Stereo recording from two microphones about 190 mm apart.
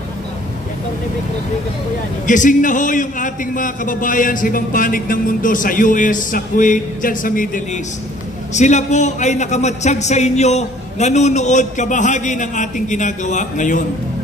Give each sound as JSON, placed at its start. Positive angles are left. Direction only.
{"t": 2.2, "sound": "a man's voice", "side_deg": 40}